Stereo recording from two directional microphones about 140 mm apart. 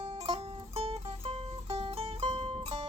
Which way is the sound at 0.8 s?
45° right (ahead or behind).